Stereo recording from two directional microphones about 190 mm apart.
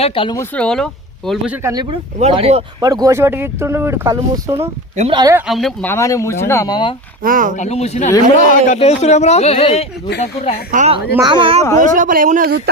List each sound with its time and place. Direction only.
0.0 s speech: 30° left (ahead or behind)
0.3 s speech: 5° left (ahead or behind)
1.6 s speech: 20° right (ahead or behind)
2.1 s speech: 35° right (ahead or behind)
2.8 s speech: 20° right (ahead or behind)
5.5 s speech: centre (ahead or behind)
5.9 s speech: 15° left (ahead or behind)
7.2 s a man's voice: 45° right (ahead or behind)
7.5 s speech: 35° left (ahead or behind)
10.7 s speech: 40° right (ahead or behind)
11.2 s speech: 25° right (ahead or behind)
11.8 s a man's voice: 45° right (ahead or behind)